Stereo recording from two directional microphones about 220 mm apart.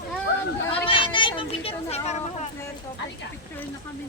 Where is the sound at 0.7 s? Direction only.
25° left (ahead or behind).